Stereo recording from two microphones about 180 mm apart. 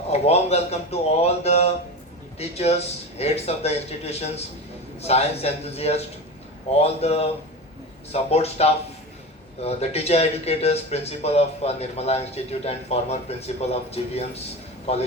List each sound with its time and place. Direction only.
0.1 s a man's voice: 35° left (ahead or behind)